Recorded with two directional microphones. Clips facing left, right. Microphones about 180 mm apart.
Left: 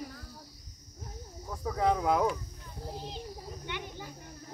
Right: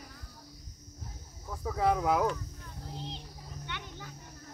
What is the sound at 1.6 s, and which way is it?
Speech, 5° right (ahead or behind).